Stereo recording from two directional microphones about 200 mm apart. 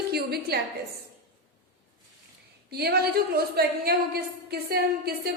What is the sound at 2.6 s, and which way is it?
A woman's voice, 55° right (ahead or behind).